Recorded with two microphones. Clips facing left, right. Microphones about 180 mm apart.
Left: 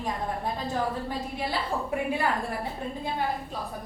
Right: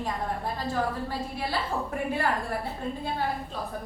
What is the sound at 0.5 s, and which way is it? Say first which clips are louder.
A woman's voice: even; 15° left (ahead or behind).